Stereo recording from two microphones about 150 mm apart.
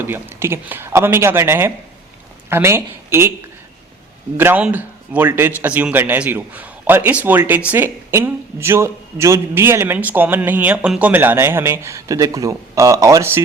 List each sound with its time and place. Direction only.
0.0 s a man's voice: 15° right (ahead or behind)
4.4 s a man's voice: 10° right (ahead or behind)